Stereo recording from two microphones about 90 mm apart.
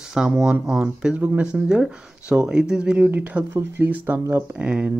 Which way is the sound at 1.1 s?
20° right (ahead or behind).